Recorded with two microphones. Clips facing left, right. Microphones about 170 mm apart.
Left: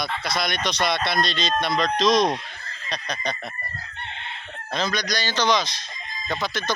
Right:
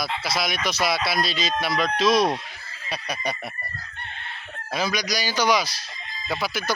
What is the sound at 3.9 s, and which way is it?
Chicken, 20° left (ahead or behind).